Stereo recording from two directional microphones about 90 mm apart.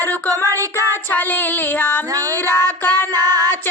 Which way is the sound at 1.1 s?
20° left (ahead or behind).